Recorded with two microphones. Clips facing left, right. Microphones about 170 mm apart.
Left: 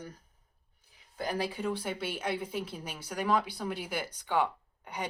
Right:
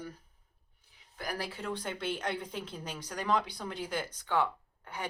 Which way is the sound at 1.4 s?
10° left (ahead or behind).